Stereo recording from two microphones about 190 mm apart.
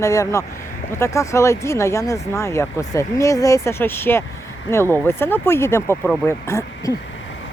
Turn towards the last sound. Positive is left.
turn(degrees=15)  # may be behind; listen again after turning